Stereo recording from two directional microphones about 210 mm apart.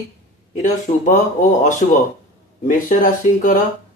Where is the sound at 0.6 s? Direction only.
35° left (ahead or behind).